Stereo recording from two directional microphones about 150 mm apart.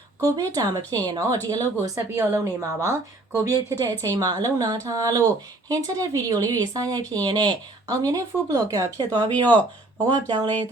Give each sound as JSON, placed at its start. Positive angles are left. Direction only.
{"t": 0.2, "sound": "a woman's voice", "side_deg": -20}